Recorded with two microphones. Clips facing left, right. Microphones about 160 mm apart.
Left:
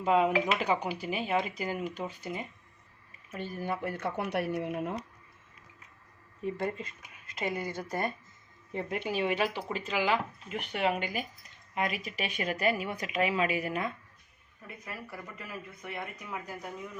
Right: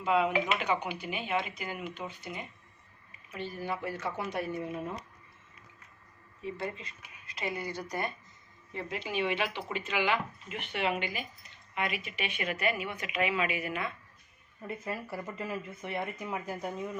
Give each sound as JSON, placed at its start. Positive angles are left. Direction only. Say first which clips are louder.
{"t": 0.0, "sound": "speech", "louder": "left 2 dB", "side_deg": 40}
{"t": 3.3, "sound": "speech", "louder": "left 1 dB", "side_deg": 45}
{"t": 6.4, "sound": "speech", "louder": "left 4 dB", "side_deg": 45}
{"t": 9.1, "sound": "speech", "louder": "left 1 dB", "side_deg": 40}
{"t": 14.8, "sound": "speech", "louder": "right 4 dB", "side_deg": -30}